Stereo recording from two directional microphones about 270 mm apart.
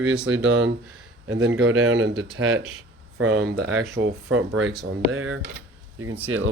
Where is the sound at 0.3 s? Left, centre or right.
Right.